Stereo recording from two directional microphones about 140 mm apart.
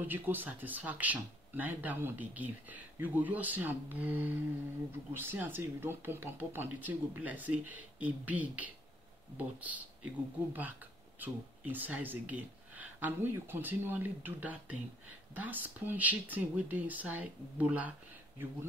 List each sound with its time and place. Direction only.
0.0 s speech: 15° right (ahead or behind)